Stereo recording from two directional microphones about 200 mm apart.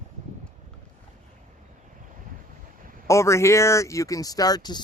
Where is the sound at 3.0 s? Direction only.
15° left (ahead or behind).